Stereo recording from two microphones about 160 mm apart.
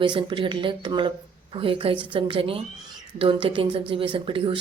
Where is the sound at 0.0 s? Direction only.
30° right (ahead or behind).